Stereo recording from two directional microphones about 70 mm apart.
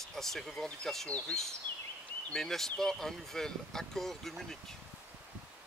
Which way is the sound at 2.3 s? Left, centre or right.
Centre.